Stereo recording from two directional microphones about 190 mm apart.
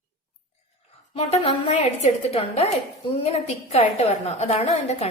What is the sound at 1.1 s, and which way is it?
A woman's voice, 30° left (ahead or behind).